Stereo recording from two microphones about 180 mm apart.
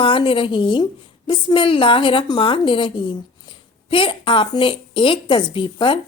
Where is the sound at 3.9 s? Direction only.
30° left (ahead or behind).